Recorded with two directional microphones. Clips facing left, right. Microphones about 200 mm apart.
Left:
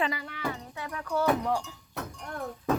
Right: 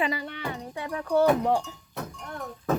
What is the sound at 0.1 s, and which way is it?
Speech, 30° right (ahead or behind).